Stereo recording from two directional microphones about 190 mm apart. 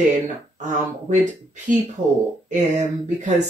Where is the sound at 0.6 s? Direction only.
40° right (ahead or behind).